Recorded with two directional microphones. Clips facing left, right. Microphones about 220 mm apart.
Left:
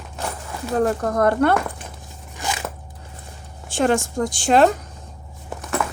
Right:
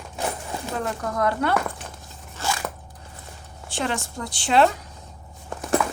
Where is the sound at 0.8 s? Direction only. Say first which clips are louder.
Left 7 dB; 45° left (ahead or behind).